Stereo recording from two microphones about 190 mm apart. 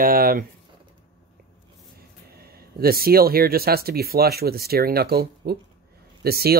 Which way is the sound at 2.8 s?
55° right (ahead or behind).